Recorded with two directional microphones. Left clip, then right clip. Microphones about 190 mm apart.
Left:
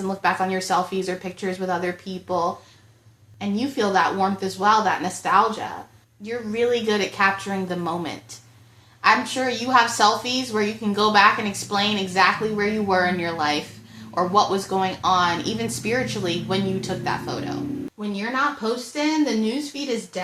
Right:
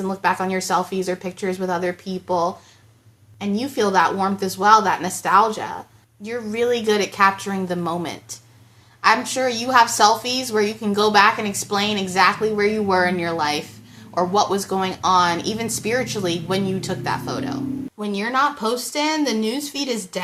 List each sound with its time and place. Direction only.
0.1 s a woman's voice: 15° right (ahead or behind)
18.0 s speech: 35° right (ahead or behind)